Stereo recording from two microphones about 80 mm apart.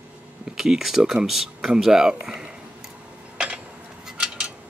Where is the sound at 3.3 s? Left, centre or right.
Centre.